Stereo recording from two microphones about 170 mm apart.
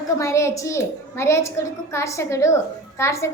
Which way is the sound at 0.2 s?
15° left (ahead or behind).